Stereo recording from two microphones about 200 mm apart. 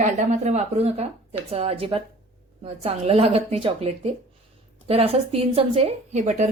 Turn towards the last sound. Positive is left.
turn(degrees=-35)  # may be behind; listen again after turning